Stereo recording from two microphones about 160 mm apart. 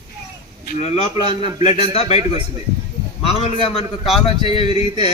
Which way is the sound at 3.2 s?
35° left (ahead or behind).